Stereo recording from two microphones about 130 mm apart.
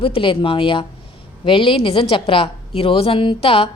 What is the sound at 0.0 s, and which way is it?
A woman's voice, 40° left (ahead or behind).